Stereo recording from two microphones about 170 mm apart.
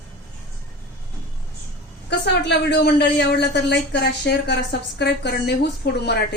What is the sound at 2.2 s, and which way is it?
Speech, 80° left.